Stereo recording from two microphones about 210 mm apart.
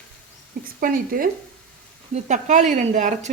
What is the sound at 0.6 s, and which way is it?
Speech, 40° right (ahead or behind).